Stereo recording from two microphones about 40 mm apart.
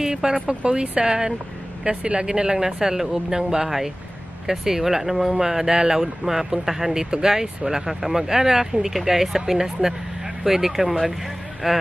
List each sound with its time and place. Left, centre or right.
0.0 s speech: centre